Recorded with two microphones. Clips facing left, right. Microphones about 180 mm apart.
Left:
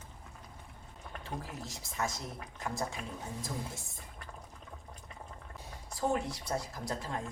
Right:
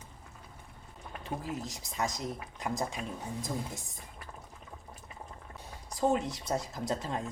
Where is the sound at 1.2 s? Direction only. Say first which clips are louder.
Right 6 dB; 20° right (ahead or behind).